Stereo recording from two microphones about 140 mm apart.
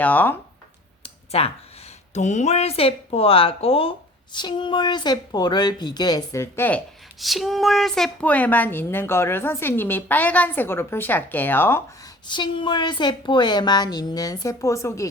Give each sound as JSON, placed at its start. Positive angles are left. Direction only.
{"t": 0.0, "sound": "a woman's voice", "side_deg": 10}
{"t": 1.0, "sound": "clicking", "side_deg": 45}
{"t": 2.1, "sound": "speech", "side_deg": 55}
{"t": 7.2, "sound": "a woman's voice", "side_deg": 0}
{"t": 12.3, "sound": "speech", "side_deg": 35}